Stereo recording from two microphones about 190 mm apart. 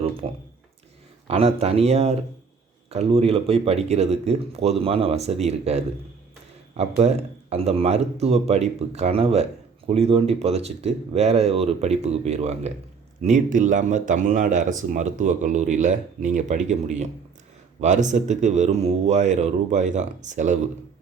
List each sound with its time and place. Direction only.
0.2 s speech: 35° right (ahead or behind)
7.0 s speech: 35° right (ahead or behind)